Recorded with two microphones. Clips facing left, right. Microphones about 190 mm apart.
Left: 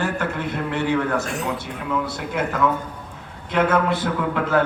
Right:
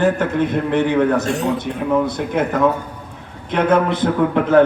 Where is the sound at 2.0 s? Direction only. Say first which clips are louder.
Right 6 dB; 20° right (ahead or behind).